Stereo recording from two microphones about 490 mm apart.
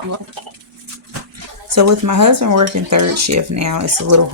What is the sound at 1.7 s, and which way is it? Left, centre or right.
Speech, right.